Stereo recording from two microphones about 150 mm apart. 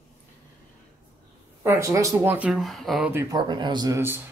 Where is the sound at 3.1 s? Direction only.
20° right (ahead or behind).